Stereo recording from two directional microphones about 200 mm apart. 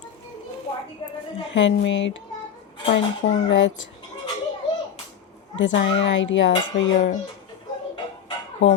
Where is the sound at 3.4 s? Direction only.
65° left (ahead or behind).